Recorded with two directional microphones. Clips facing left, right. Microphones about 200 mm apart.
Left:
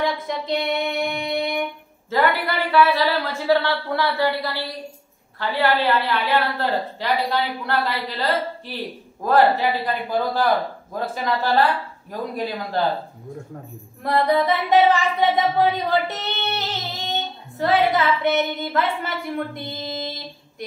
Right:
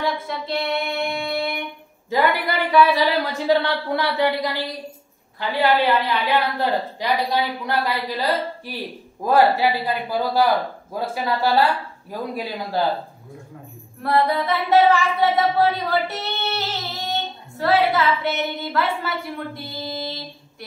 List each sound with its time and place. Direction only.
0.0 s child singing: 15° left (ahead or behind)
1.1 s music: 20° left (ahead or behind)
2.0 s a woman's voice: 15° right (ahead or behind)
14.0 s singing: 20° left (ahead or behind)